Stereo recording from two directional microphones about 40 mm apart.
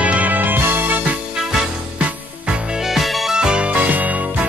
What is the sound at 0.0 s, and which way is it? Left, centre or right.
Music, right.